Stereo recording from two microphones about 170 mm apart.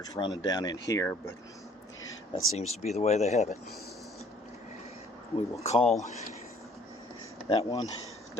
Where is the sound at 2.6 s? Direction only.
40° left (ahead or behind).